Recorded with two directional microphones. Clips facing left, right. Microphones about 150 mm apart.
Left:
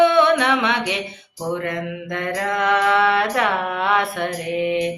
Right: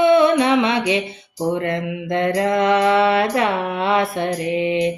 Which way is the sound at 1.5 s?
25° right (ahead or behind).